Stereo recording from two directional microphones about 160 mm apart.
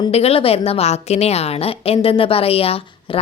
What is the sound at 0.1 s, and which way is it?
A woman's voice, 40° left (ahead or behind).